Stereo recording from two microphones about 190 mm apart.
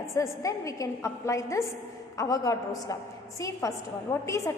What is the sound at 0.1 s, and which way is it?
A woman's voice, 15° left (ahead or behind).